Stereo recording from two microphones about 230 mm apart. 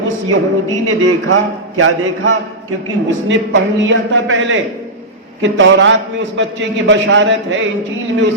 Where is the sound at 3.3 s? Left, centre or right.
Right.